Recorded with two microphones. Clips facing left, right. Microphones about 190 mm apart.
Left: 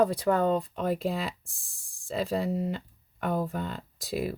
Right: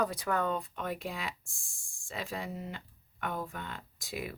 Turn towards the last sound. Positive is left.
turn(degrees=35)  # may be behind; listen again after turning